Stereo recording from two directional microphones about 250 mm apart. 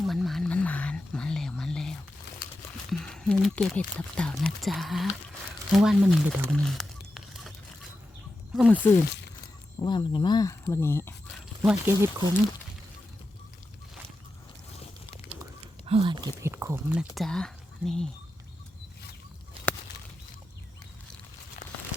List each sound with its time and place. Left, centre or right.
0.0 s whispering: centre
2.9 s speech: centre
8.5 s speech: centre
9.0 s a sound: left
9.8 s speech: centre
11.6 s speech: centre
15.9 s speech: centre